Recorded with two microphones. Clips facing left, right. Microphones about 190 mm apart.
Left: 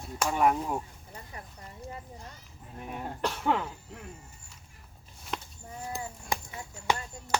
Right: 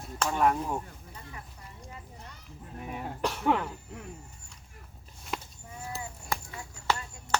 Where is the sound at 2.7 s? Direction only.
Centre (ahead or behind).